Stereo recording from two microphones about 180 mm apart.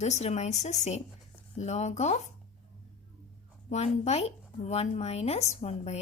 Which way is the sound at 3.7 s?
35° left (ahead or behind).